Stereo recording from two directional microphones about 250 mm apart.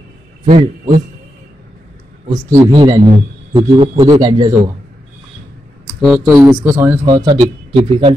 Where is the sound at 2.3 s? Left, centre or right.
Centre.